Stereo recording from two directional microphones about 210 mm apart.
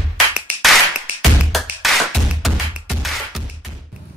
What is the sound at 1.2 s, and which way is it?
Music, centre (ahead or behind).